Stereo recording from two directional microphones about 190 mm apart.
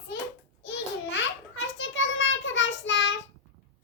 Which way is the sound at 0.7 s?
70° left (ahead or behind).